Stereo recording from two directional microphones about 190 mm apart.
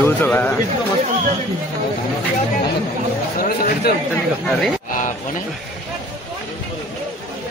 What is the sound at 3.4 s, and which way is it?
Speech, 50° left (ahead or behind).